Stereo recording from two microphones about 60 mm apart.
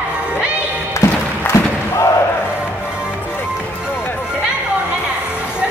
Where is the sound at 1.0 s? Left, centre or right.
Left.